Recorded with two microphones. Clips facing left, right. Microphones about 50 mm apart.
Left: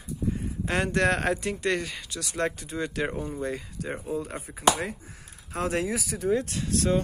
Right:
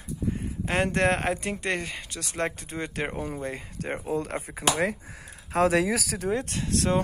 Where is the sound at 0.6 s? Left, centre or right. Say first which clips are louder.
Right 1 dB; right.